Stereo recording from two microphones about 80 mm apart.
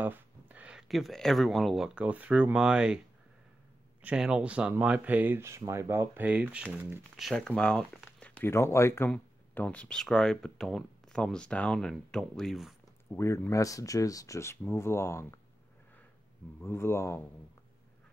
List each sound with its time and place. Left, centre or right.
0.0 s a sound: right
0.8 s speech: centre
2.0 s speech: centre
4.0 s speech: centre
5.4 s speech: right; by 6.8 s centre
7.2 s speech: centre
8.5 s speech: left
9.1 s speech: centre
13.1 s speech: left
13.5 s speech: left
16.6 s speech: left